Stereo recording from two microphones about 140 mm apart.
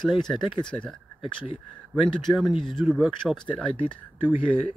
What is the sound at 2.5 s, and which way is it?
Speech, 35° left (ahead or behind).